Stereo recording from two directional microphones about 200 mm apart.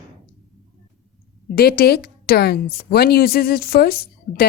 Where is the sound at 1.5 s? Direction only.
50° left (ahead or behind).